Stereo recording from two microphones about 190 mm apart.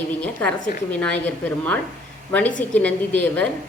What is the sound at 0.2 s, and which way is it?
A woman's voice, 5° left (ahead or behind).